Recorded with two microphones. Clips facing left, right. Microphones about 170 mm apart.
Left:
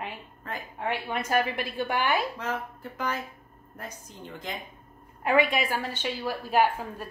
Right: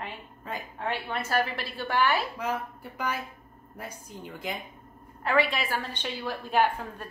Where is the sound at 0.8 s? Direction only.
10° left (ahead or behind).